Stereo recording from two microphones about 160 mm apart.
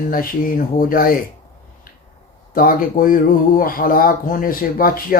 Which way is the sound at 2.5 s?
60° left (ahead or behind).